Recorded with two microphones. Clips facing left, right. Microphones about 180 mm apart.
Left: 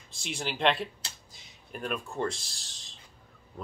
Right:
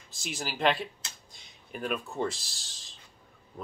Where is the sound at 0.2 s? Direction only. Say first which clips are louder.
Even; 5° right (ahead or behind).